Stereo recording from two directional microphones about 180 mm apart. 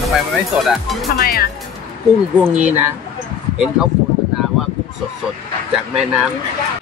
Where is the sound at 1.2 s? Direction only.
60° left (ahead or behind).